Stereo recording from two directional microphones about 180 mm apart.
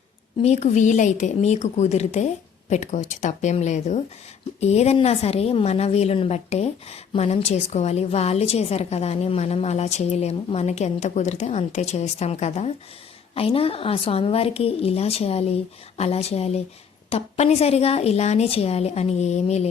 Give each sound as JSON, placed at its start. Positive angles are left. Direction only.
{"t": 0.4, "sound": "a woman's voice", "side_deg": 40}